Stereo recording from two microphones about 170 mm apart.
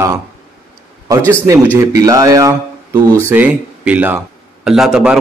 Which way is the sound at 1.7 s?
15° right (ahead or behind).